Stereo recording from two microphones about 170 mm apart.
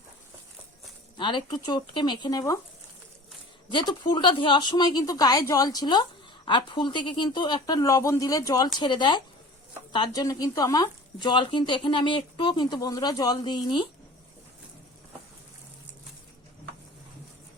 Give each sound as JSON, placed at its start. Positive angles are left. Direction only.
{"t": 1.1, "sound": "speech", "side_deg": 30}
{"t": 3.7, "sound": "speech", "side_deg": 25}